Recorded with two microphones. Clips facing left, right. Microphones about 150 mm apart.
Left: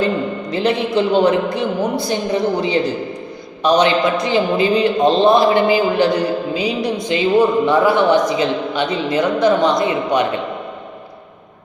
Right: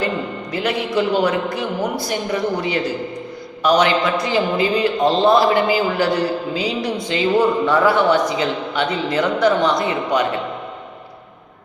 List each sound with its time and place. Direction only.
0.5 s a man's voice: 25° left (ahead or behind)